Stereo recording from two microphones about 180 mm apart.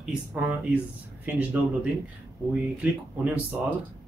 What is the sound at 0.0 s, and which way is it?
Speech, 5° right (ahead or behind).